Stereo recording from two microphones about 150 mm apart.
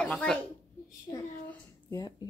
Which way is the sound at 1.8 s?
25° left (ahead or behind).